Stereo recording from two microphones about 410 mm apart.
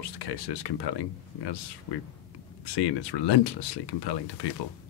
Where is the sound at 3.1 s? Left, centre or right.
Left.